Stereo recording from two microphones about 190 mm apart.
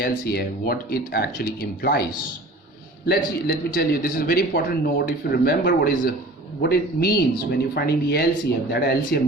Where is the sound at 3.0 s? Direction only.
55° left (ahead or behind).